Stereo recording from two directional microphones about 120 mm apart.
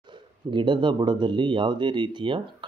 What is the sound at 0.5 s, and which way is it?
Speech, 40° right (ahead or behind).